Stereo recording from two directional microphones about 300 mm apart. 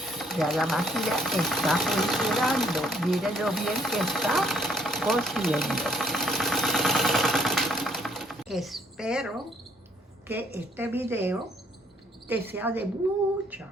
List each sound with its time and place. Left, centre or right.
0.0 s a woman's voice: centre